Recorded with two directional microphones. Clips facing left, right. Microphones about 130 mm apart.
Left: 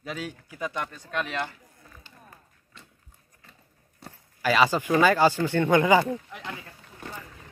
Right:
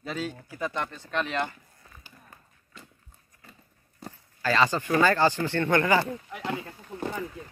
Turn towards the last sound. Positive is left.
turn(degrees=-30)  # may be behind; listen again after turning